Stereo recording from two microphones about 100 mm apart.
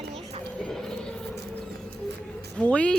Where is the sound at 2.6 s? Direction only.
10° left (ahead or behind).